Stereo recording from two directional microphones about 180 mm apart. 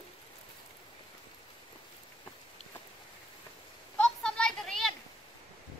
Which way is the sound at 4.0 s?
5° left (ahead or behind).